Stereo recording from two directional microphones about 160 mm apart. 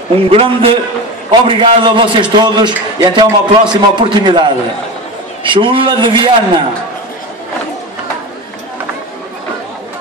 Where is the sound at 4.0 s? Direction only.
30° right (ahead or behind).